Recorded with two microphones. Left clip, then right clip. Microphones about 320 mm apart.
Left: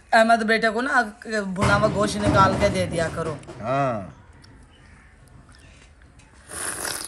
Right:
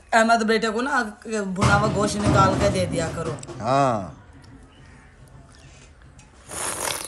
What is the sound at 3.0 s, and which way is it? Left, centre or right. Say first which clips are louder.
A man's voice: left 2 dB; centre.